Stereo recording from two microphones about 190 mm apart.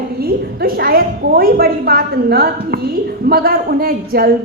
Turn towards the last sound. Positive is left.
turn(degrees=-50)  # may be behind; listen again after turning